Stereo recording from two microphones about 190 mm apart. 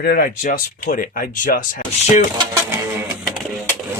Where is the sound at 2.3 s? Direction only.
15° right (ahead or behind).